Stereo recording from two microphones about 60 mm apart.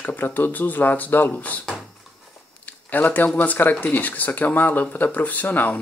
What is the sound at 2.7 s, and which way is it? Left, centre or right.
Speech, left.